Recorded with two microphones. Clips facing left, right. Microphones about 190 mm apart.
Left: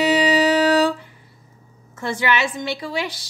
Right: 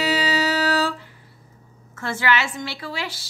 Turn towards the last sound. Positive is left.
turn(degrees=15)  # may be behind; listen again after turning